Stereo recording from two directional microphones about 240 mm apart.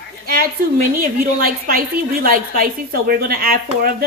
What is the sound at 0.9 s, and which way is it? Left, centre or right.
A woman's voice, right.